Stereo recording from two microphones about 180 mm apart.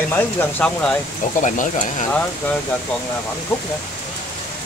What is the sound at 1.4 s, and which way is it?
Speech, 45° left (ahead or behind).